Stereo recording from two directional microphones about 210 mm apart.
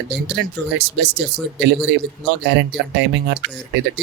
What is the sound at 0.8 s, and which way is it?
Speech, 50° right (ahead or behind).